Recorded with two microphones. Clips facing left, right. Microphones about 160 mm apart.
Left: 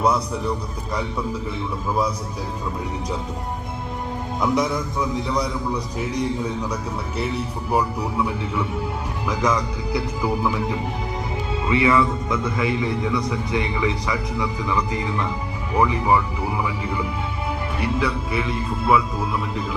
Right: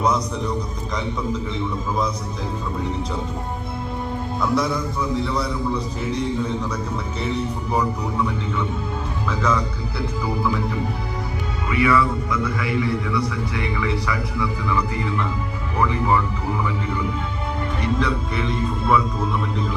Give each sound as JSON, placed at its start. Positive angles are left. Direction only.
{"t": 4.4, "sound": "a man's voice", "side_deg": 20}
{"t": 7.7, "sound": "a man's voice", "side_deg": 10}
{"t": 11.7, "sound": "a man's voice", "side_deg": 25}
{"t": 17.7, "sound": "speech", "side_deg": 5}